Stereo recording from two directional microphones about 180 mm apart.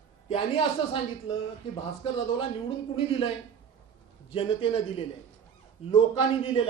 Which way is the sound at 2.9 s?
30° left (ahead or behind).